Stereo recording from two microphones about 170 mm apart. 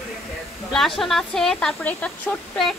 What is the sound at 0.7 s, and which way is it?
Speech, centre (ahead or behind).